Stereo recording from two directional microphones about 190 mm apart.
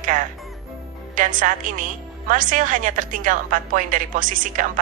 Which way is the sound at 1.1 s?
45° right (ahead or behind).